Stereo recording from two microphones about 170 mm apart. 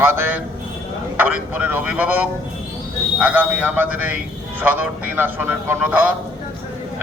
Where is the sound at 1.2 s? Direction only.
10° right (ahead or behind).